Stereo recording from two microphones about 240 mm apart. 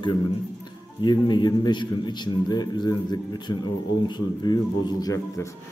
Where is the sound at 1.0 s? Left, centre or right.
Centre.